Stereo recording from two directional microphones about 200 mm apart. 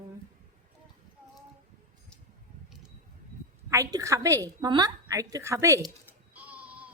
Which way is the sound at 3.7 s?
15° right (ahead or behind).